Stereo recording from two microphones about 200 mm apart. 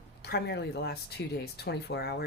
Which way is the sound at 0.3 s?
55° left (ahead or behind).